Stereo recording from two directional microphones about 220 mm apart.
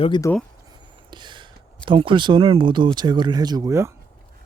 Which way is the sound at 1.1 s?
20° right (ahead or behind).